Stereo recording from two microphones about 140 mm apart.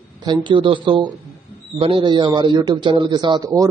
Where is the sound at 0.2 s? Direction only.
35° right (ahead or behind).